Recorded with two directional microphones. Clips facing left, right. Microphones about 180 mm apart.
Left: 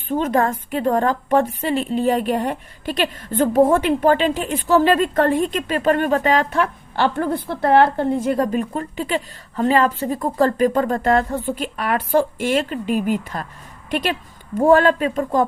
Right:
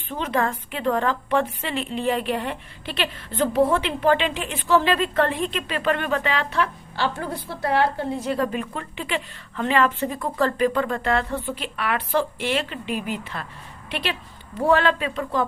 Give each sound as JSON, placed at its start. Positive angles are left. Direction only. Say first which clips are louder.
{"t": 0.1, "sound": "a woman's voice", "louder": "left 6 dB", "side_deg": 45}